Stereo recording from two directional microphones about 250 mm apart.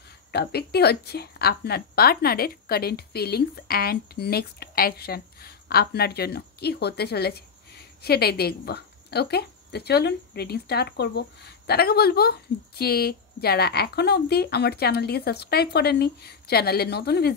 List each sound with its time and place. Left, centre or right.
0.3 s a woman's voice: left